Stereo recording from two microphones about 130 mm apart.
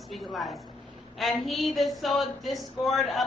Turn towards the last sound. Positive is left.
turn(degrees=0)  # may be behind; listen again after turning